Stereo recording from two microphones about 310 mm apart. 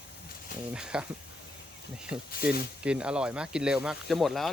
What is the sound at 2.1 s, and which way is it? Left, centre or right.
Speech, centre.